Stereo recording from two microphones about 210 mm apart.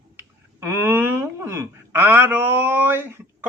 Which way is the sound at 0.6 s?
10° right (ahead or behind).